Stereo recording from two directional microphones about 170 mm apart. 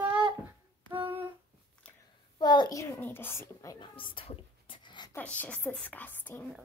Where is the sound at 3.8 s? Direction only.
30° left (ahead or behind).